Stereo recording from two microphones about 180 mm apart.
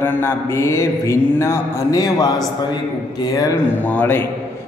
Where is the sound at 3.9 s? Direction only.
10° left (ahead or behind).